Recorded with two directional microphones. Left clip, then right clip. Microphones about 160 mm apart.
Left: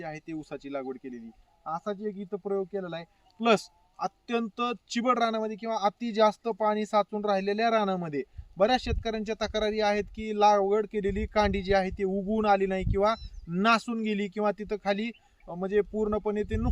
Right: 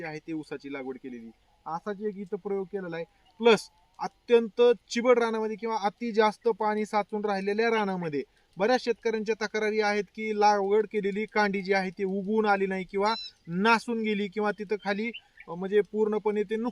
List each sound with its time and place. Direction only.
0.0 s a man's voice: 40° left (ahead or behind)